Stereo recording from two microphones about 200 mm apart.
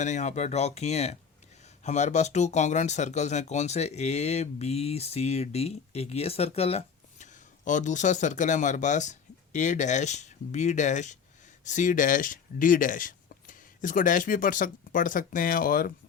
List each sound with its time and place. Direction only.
0.0 s speech: 35° left (ahead or behind)